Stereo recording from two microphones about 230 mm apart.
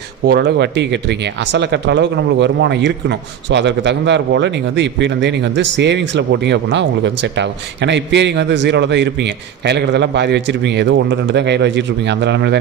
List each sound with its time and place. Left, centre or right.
0.3 s speech: right